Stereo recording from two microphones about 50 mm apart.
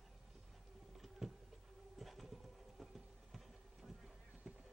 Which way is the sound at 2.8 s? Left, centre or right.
Centre.